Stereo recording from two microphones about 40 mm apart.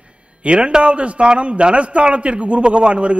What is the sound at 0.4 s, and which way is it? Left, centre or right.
A man's voice, right.